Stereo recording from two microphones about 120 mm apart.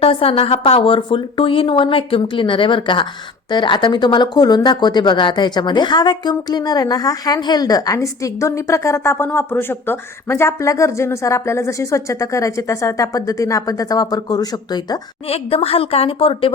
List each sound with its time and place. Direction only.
0.0 s a woman's voice: 50° left (ahead or behind); by 14.9 s 35° left (ahead or behind)
15.3 s a woman's voice: 55° left (ahead or behind)